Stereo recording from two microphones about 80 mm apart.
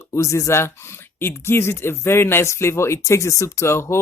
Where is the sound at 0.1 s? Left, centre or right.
Left.